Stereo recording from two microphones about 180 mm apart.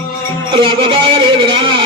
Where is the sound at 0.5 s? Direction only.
30° right (ahead or behind).